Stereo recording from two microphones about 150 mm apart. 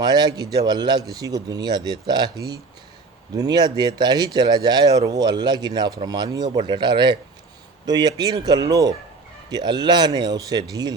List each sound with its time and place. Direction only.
0.0 s speech: 30° right (ahead or behind)